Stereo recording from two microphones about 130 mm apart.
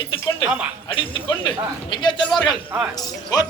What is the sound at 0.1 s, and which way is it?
Speech, 40° left (ahead or behind).